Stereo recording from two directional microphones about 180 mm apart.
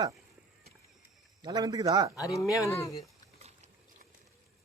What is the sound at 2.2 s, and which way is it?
Speech, 20° left (ahead or behind).